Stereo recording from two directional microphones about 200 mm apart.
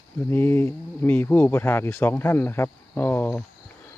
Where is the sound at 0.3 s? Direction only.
10° left (ahead or behind).